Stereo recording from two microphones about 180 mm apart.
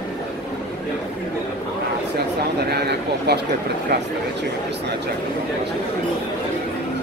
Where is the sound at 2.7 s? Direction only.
65° right (ahead or behind).